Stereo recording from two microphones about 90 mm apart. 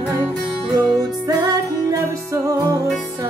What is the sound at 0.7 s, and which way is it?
Music, 40° right (ahead or behind).